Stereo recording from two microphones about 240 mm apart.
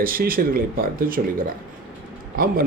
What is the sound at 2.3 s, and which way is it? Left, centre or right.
Speech, right.